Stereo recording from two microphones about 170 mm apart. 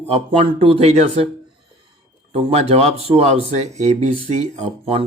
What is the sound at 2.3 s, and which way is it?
Speech, 40° right (ahead or behind).